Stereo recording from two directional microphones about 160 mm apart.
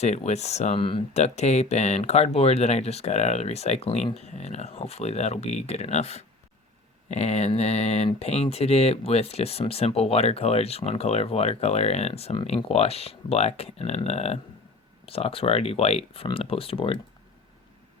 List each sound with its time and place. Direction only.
0.0 s speech: 45° left (ahead or behind)